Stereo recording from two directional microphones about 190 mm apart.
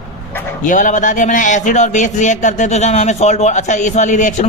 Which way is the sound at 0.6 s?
40° left (ahead or behind).